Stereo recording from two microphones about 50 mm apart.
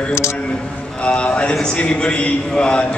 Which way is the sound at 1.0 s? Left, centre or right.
Left.